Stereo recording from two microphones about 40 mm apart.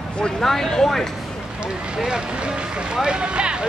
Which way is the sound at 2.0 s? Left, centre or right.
Centre.